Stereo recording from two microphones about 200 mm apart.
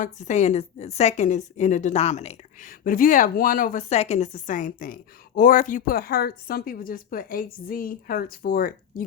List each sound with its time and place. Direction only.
0.0 s a woman's voice: 35° left (ahead or behind)